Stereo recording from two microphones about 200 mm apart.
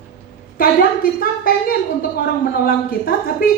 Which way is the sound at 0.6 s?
45° left (ahead or behind).